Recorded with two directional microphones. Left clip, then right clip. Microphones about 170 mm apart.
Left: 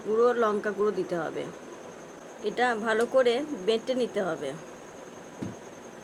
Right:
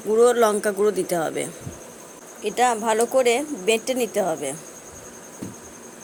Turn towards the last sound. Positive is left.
turn(degrees=-25)  # may be behind; listen again after turning